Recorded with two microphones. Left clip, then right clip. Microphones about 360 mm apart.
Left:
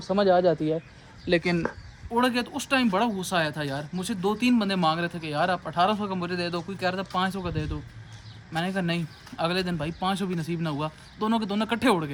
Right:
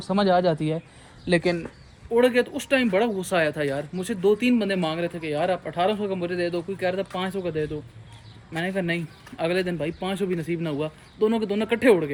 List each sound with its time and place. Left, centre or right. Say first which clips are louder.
0.1 s speech: even; right
2.1 s speech: right 5 dB; centre